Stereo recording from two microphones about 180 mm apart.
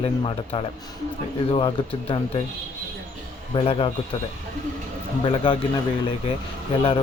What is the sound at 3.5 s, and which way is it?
Speech, 30° left (ahead or behind).